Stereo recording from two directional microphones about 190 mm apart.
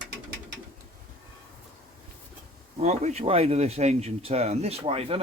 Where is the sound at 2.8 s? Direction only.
35° right (ahead or behind).